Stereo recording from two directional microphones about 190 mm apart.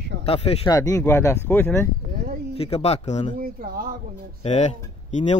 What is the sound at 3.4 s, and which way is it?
Speech, 50° right (ahead or behind).